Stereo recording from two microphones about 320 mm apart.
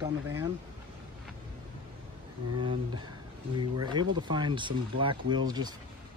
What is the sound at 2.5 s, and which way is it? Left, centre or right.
Speech, centre.